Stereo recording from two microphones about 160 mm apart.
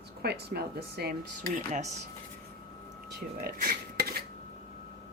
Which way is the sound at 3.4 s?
70° right (ahead or behind).